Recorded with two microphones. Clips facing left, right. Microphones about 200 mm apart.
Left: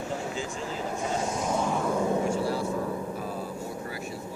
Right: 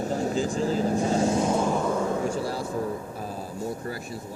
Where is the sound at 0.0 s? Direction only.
40° right (ahead or behind).